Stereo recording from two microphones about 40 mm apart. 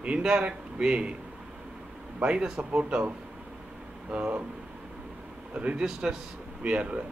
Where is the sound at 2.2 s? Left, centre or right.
Right.